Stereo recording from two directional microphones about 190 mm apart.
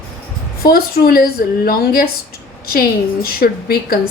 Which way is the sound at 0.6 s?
55° left (ahead or behind).